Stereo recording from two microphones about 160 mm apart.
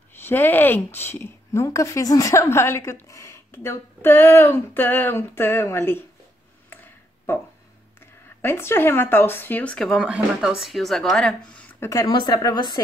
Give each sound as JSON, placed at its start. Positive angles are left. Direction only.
{"t": 0.1, "sound": "a woman's voice", "side_deg": 15}
{"t": 6.7, "sound": "tick", "side_deg": 15}
{"t": 8.4, "sound": "a woman's voice", "side_deg": 15}
{"t": 11.8, "sound": "speech", "side_deg": 20}